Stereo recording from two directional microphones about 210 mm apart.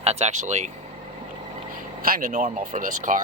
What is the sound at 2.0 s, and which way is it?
Speech, 40° right (ahead or behind).